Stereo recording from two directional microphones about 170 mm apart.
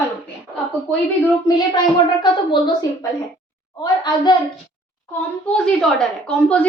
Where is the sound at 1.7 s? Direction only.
25° left (ahead or behind).